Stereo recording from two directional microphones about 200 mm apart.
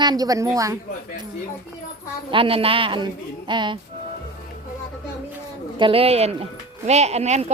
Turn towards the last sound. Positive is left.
turn(degrees=-35)  # may be behind; listen again after turning